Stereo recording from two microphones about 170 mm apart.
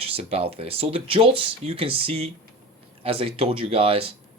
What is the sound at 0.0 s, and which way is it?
Speech, 35° right (ahead or behind).